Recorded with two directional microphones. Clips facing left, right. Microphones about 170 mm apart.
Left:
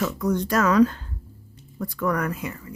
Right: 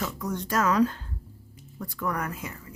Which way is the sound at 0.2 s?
90° left.